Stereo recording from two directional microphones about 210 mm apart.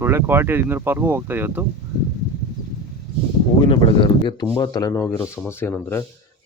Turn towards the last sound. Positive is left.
turn(degrees=10)  # may be behind; listen again after turning